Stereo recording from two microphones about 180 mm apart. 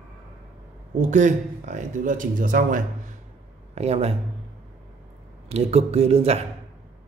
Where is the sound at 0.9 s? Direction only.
45° right (ahead or behind).